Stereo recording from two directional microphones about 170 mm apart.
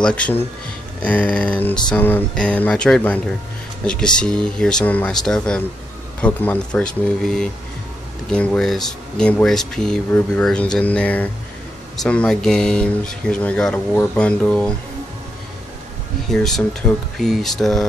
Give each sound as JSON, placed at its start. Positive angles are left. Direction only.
{"t": 0.0, "sound": "speech", "side_deg": 5}
{"t": 16.3, "sound": "speech", "side_deg": 0}